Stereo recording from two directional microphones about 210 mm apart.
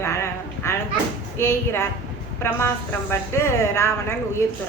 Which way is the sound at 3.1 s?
10° left (ahead or behind).